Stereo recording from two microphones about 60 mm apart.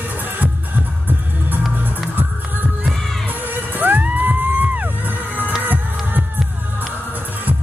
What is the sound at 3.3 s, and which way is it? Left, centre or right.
Music, right.